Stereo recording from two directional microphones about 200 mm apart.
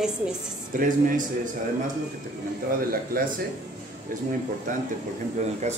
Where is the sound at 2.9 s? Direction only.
45° right (ahead or behind).